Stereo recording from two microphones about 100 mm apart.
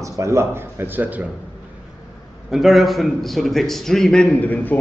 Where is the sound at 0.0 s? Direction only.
30° right (ahead or behind).